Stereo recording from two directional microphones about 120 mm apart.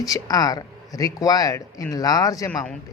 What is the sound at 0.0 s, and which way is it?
Speech, 30° left (ahead or behind).